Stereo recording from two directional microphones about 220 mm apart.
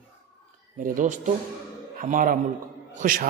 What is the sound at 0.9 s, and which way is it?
A woman's voice, 35° right (ahead or behind).